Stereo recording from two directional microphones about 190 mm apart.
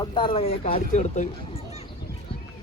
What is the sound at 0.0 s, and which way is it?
Speech, 25° left (ahead or behind).